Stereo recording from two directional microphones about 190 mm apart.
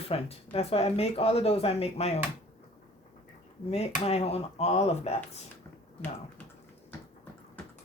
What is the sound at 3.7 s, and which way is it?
Speech, 35° left (ahead or behind).